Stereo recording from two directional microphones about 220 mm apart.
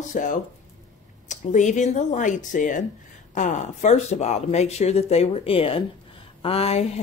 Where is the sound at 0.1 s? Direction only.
35° left (ahead or behind).